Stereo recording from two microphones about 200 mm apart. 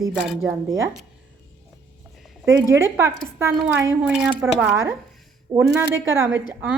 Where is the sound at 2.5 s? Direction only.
15° right (ahead or behind).